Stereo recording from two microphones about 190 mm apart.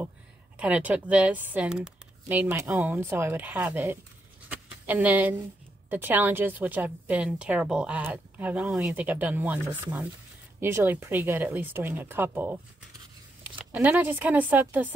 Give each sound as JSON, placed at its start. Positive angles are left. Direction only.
{"t": 0.6, "sound": "a woman's voice", "side_deg": -5}
{"t": 4.5, "sound": "a sound", "side_deg": -10}
{"t": 5.9, "sound": "a woman's voice", "side_deg": -10}
{"t": 13.7, "sound": "a woman's voice", "side_deg": -10}